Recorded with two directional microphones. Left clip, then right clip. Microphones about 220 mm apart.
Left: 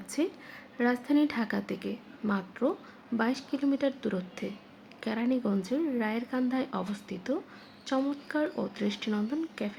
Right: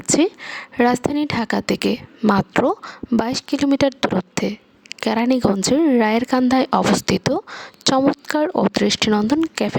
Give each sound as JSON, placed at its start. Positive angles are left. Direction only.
{"t": 0.1, "sound": "speech", "side_deg": -45}